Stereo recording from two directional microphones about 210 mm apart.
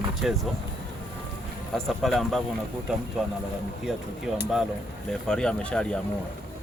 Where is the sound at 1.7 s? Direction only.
Centre (ahead or behind).